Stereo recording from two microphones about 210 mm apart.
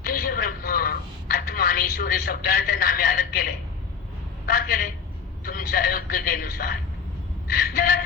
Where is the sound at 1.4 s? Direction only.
45° left (ahead or behind).